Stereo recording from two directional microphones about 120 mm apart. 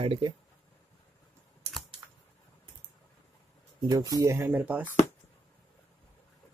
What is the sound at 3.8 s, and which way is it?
Speech, 30° right (ahead or behind).